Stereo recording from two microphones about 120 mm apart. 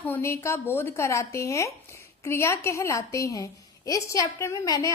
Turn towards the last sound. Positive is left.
turn(degrees=30)  # may be behind; listen again after turning